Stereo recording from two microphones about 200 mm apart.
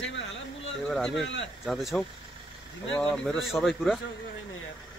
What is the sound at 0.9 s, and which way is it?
Speech, 5° left (ahead or behind).